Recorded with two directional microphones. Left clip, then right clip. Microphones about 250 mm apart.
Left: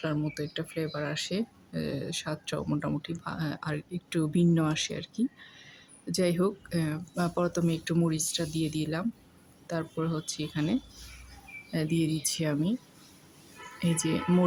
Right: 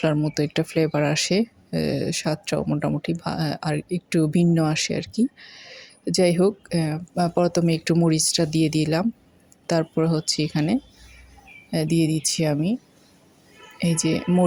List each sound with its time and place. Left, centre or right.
0.0 s speech: right
13.7 s speech: centre